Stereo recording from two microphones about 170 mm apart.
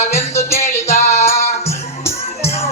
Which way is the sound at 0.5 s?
40° left (ahead or behind).